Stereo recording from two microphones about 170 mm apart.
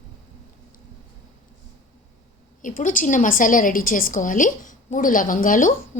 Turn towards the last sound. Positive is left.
turn(degrees=50)  # may be behind; listen again after turning